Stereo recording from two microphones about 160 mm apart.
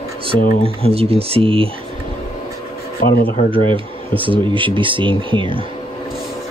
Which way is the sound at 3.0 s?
65° left (ahead or behind).